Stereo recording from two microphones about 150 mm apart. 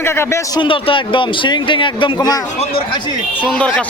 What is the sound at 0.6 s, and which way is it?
A man's voice, 35° left (ahead or behind).